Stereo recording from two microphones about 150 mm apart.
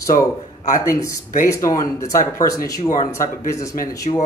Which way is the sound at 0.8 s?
20° left (ahead or behind).